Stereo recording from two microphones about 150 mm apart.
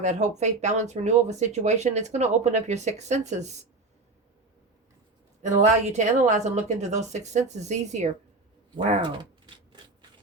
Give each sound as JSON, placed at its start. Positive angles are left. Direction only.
{"t": 0.0, "sound": "speech", "side_deg": -50}
{"t": 5.4, "sound": "speech", "side_deg": -50}